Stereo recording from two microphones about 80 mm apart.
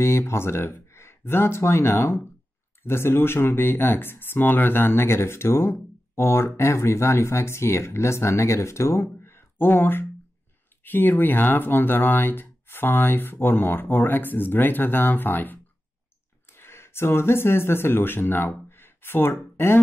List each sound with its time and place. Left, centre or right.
0.0 s speech: left